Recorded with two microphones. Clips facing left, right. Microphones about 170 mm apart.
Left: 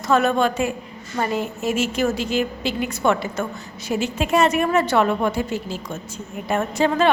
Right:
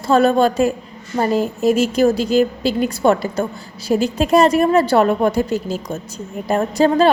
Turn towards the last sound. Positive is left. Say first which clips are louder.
# right 5 dB
turn(degrees=-35)  # may be behind; listen again after turning